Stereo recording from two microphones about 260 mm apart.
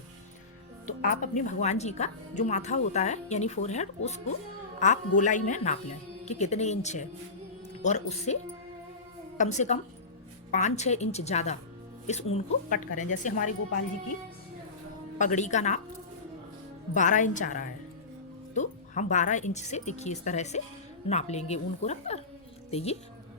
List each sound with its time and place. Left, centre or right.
0.9 s speech: left
9.4 s speech: left
15.2 s speech: left
16.9 s speech: left